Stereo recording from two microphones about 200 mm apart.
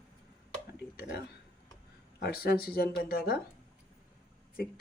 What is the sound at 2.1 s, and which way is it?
Speech, 50° left (ahead or behind).